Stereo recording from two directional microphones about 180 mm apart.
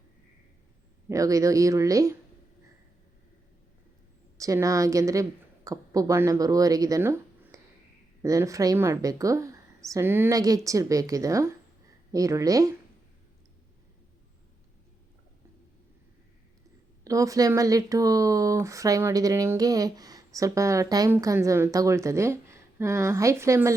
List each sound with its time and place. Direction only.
1.0 s speech: 20° right (ahead or behind)
4.4 s a woman's voice: 20° right (ahead or behind)
17.0 s speech: 20° right (ahead or behind)